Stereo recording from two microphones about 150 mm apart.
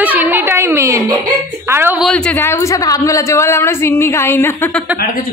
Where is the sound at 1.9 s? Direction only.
5° left (ahead or behind).